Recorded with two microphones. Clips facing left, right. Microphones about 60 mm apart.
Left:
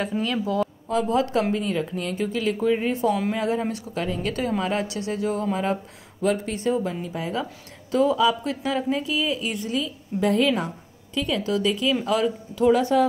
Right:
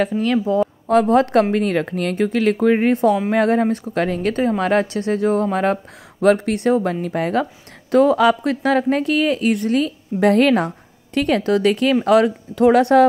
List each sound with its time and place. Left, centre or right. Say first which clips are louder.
0.2 s speech: right 7 dB; right
1.5 s speech: right 6 dB; right
4.3 s speech: right 7 dB; right
4.6 s speech: right 7 dB; right
6.2 s a woman's voice: right 8 dB; right